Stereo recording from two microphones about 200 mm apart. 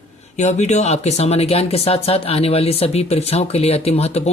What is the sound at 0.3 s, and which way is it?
Speech, 35° left (ahead or behind).